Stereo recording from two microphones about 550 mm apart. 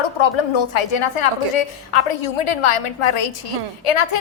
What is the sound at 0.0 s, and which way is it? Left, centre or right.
A woman's voice, left.